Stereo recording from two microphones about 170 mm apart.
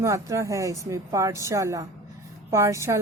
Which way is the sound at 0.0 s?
20° right (ahead or behind).